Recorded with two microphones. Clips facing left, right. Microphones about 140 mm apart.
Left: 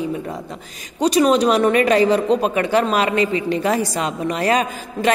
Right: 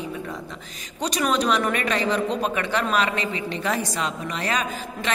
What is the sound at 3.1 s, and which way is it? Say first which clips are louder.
Speech: left 9 dB; 35° right (ahead or behind).